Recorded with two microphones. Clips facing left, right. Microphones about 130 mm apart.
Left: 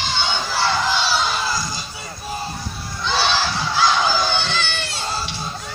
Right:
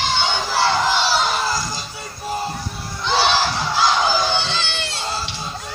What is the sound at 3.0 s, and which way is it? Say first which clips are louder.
Crowd: right 2 dB; 30° right (ahead or behind).